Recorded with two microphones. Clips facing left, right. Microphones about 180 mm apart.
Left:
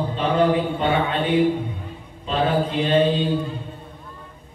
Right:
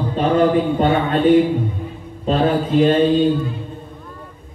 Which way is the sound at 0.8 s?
45° right (ahead or behind).